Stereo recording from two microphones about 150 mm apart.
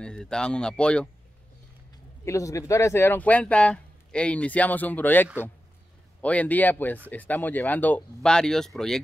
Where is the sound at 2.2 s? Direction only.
20° left (ahead or behind).